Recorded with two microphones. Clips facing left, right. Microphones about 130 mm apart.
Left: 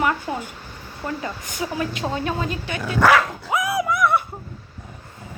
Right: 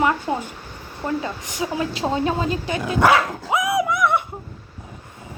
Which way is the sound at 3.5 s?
20° right (ahead or behind).